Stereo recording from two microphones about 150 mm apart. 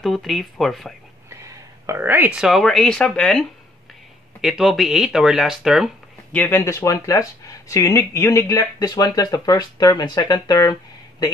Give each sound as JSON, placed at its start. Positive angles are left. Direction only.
{"t": 0.0, "sound": "speech", "side_deg": 0}
{"t": 1.9, "sound": "speech", "side_deg": -15}
{"t": 6.3, "sound": "speech", "side_deg": 15}